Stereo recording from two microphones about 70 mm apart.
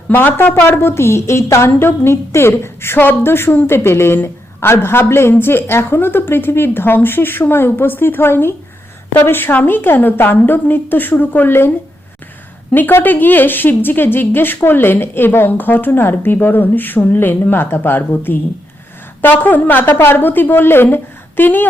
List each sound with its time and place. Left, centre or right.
0.1 s a woman's voice: left
12.7 s a woman's voice: left